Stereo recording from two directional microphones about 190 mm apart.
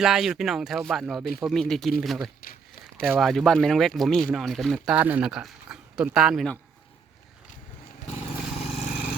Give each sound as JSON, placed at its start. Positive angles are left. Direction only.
{"t": 0.0, "sound": "speech", "side_deg": 0}
{"t": 8.1, "sound": "vehicle", "side_deg": 30}